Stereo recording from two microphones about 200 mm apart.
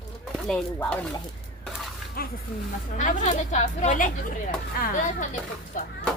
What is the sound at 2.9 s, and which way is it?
A woman's voice, 35° left (ahead or behind).